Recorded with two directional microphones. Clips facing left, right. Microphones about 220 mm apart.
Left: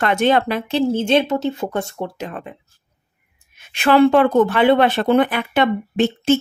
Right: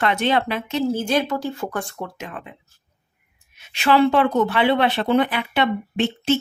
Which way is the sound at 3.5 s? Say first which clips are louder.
Left 3 dB; 50° left (ahead or behind).